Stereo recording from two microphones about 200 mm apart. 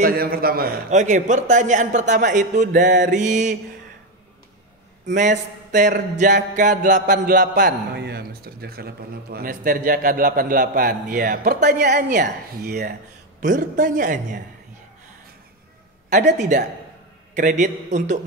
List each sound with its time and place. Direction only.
0.0 s a man's voice: 50° right (ahead or behind)
5.1 s a man's voice: 40° right (ahead or behind)
6.1 s a sound: 40° right (ahead or behind)
13.4 s a man's voice: 40° right (ahead or behind)
16.3 s a man's voice: 35° right (ahead or behind)